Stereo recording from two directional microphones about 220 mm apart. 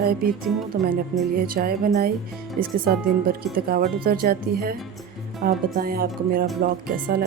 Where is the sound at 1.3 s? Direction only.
40° right (ahead or behind).